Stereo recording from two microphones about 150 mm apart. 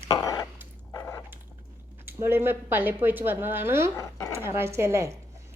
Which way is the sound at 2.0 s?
15° right (ahead or behind).